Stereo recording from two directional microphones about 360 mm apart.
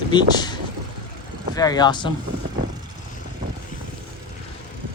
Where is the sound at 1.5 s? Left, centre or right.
Centre.